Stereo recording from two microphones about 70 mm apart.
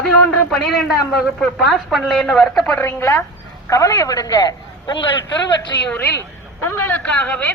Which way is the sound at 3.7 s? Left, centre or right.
Left.